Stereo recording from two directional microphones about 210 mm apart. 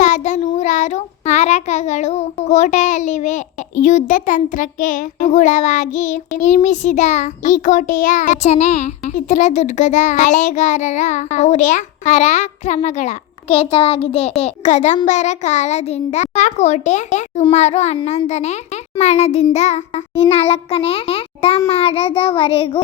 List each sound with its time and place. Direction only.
0.0 s child singing: 35° left (ahead or behind)
19.5 s a child's voice: 30° left (ahead or behind)